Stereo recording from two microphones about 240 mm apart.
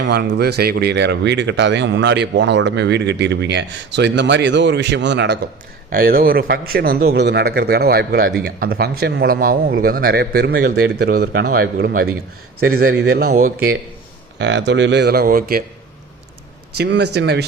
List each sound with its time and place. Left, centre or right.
0.0 s speech: right
14.3 s speech: right
16.7 s speech: right